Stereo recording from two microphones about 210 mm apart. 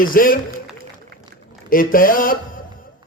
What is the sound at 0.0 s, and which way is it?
Speech, 40° left (ahead or behind).